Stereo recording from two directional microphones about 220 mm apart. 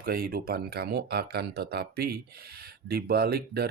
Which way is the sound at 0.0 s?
45° right (ahead or behind).